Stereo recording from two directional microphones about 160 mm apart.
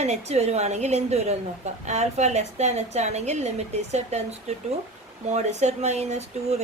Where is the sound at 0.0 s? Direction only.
45° right (ahead or behind).